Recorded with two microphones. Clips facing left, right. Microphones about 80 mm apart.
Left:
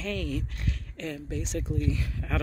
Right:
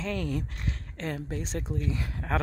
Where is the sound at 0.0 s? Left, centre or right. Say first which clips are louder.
Right 1 dB; right.